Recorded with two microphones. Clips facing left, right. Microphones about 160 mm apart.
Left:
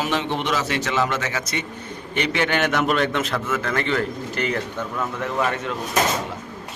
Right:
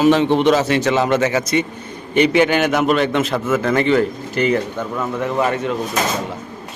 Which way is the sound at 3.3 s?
20° right (ahead or behind).